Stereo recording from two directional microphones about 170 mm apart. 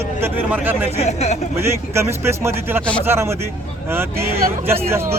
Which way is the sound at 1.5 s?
15° right (ahead or behind).